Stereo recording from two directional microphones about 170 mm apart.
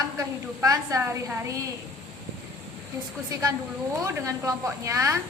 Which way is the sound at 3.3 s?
20° right (ahead or behind).